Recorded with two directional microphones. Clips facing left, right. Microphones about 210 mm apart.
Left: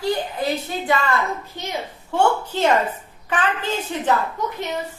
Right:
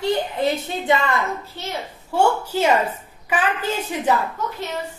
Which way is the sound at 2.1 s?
10° right (ahead or behind).